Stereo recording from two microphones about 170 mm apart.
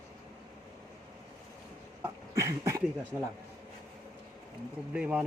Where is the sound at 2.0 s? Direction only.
20° right (ahead or behind).